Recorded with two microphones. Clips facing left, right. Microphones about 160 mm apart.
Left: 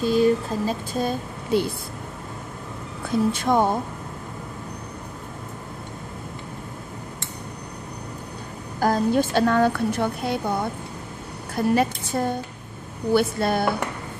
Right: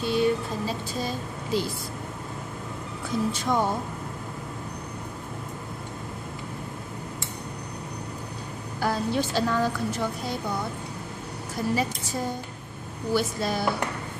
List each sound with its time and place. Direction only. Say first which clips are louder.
0.0 s a sound: left 5 dB; 40° left (ahead or behind); by 1.7 s 55° left (ahead or behind)
3.3 s a woman's voice: left 4 dB; 55° left (ahead or behind)
8.7 s a woman's voice: left 6 dB; 45° left (ahead or behind)